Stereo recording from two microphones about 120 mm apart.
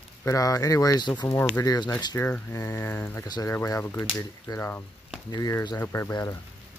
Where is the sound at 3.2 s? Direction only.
35° left (ahead or behind).